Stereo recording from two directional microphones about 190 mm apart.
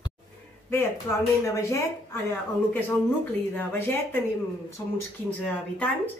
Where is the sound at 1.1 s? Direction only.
15° left (ahead or behind).